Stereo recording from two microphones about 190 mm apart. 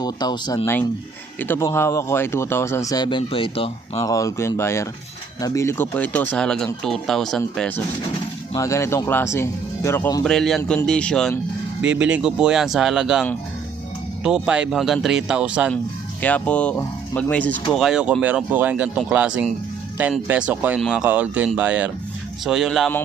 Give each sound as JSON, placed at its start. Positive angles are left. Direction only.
{"t": 0.0, "sound": "speech", "side_deg": 20}
{"t": 4.0, "sound": "speech", "side_deg": 15}
{"t": 8.5, "sound": "speech", "side_deg": 15}
{"t": 10.2, "sound": "speech", "side_deg": 0}
{"t": 10.6, "sound": "speech", "side_deg": 15}
{"t": 14.3, "sound": "speech", "side_deg": -5}
{"t": 16.2, "sound": "speech", "side_deg": 5}